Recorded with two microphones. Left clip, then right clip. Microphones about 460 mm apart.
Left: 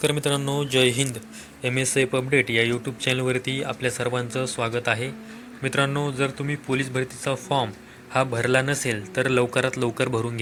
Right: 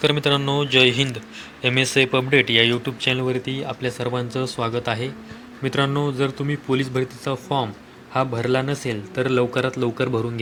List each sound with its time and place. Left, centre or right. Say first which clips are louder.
0.0 s speech: right 4 dB; left